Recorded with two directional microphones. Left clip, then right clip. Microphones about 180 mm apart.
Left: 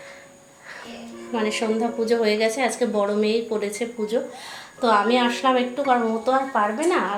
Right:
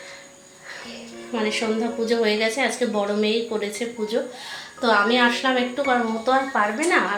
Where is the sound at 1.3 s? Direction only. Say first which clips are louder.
Even; 5° left (ahead or behind).